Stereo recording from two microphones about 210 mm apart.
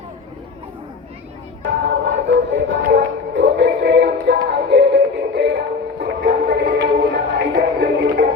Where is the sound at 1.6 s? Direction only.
60° right (ahead or behind).